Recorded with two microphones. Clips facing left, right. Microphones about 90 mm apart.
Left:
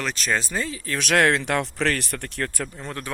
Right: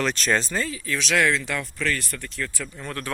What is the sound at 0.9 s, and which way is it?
Speech, 50° left (ahead or behind).